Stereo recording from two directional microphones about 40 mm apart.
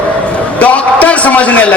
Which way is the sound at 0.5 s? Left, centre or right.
Left.